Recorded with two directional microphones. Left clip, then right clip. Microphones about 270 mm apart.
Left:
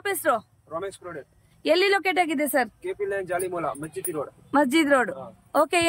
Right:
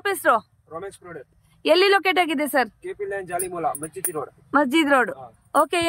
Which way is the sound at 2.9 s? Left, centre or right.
Centre.